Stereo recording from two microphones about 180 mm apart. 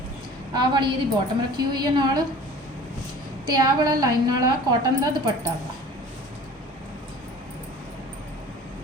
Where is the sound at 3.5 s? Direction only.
20° right (ahead or behind).